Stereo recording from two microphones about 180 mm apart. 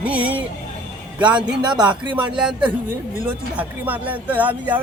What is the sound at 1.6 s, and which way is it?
Speech, 25° right (ahead or behind).